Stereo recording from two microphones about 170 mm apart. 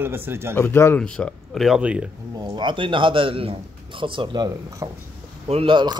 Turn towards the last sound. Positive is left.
turn(degrees=-25)  # may be behind; listen again after turning